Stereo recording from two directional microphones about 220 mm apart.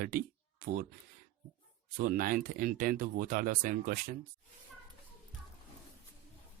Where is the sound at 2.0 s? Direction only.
40° right (ahead or behind).